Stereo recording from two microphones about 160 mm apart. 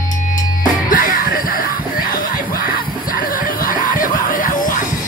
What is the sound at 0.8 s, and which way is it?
Music, 60° left (ahead or behind).